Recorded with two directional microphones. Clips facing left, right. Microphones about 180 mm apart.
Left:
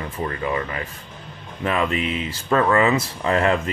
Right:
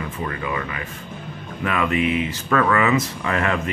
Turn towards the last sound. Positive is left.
turn(degrees=30)  # may be behind; listen again after turning